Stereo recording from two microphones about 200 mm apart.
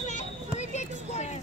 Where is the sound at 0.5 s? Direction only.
35° left (ahead or behind).